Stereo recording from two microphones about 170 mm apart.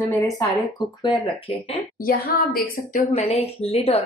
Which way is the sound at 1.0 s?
25° left (ahead or behind).